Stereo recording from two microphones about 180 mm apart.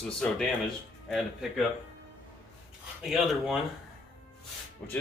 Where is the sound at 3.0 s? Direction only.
Centre (ahead or behind).